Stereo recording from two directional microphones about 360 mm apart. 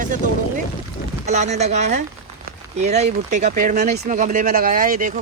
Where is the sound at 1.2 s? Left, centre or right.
Centre.